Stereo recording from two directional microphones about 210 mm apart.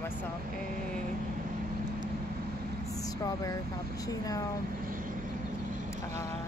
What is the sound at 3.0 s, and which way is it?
Vehicle, 15° left (ahead or behind).